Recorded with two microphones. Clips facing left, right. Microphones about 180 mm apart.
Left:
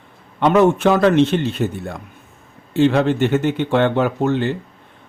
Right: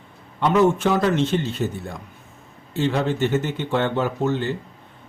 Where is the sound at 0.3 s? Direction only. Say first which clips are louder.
Left 4 dB; 65° left (ahead or behind).